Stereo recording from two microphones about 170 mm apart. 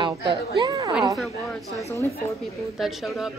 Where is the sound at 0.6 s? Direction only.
20° right (ahead or behind).